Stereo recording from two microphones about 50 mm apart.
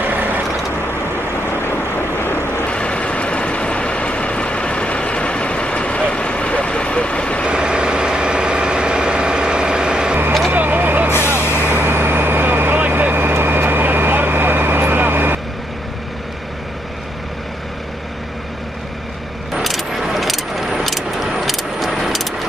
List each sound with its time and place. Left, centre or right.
0.0 s vehicle: right
2.0 s vehicle: left
2.6 s vehicle: left
7.4 s vehicle: centre
10.5 s vehicle: right
19.5 s vehicle: centre